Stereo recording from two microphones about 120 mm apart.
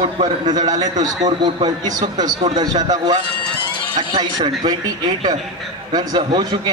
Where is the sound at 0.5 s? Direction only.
35° right (ahead or behind).